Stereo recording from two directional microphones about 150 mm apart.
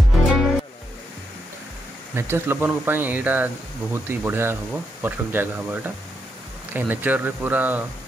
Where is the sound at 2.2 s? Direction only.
15° right (ahead or behind).